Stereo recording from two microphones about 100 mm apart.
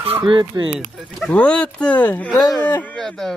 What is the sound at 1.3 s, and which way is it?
Speech, 10° left (ahead or behind).